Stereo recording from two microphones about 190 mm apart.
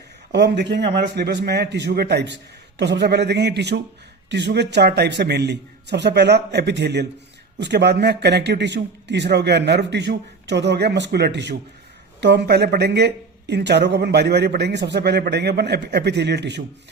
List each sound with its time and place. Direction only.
0.3 s speech: 60° right (ahead or behind)